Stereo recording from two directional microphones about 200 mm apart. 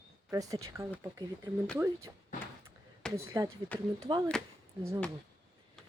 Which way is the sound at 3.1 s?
15° right (ahead or behind).